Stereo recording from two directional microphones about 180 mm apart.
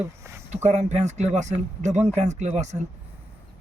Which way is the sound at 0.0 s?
15° right (ahead or behind).